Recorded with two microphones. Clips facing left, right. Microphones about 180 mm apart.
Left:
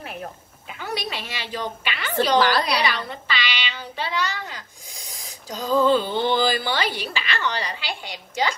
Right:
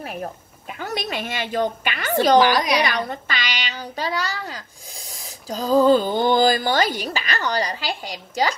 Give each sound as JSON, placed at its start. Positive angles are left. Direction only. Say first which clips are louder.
{"t": 0.7, "sound": "a child's voice", "louder": "right 2 dB", "side_deg": -45}
{"t": 2.3, "sound": "a woman's voice", "louder": "right 3 dB", "side_deg": -15}
{"t": 2.8, "sound": "a child's voice", "louder": "right 3 dB", "side_deg": -50}